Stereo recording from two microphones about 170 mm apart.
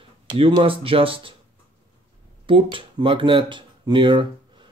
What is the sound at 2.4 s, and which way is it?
Speech, 30° right (ahead or behind).